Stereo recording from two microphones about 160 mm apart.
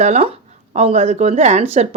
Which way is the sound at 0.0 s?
40° right (ahead or behind).